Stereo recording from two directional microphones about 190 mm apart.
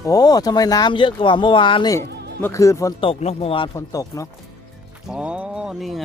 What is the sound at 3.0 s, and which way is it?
Speech, 30° left (ahead or behind).